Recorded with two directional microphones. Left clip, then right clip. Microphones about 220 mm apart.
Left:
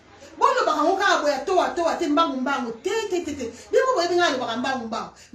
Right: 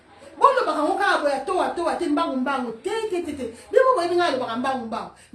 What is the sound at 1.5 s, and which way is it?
Speech, centre (ahead or behind).